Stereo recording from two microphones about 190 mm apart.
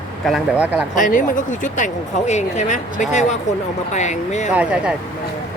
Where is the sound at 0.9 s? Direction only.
45° left (ahead or behind).